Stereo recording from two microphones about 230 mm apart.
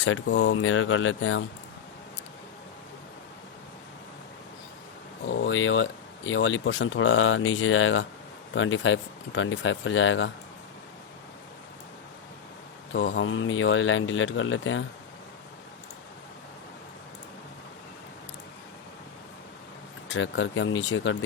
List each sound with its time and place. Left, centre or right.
0.0 s speech: left
5.2 s speech: left
12.9 s speech: left
20.1 s speech: left